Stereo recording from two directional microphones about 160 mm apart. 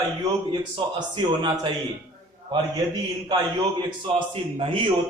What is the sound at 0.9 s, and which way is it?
Speech, 30° right (ahead or behind).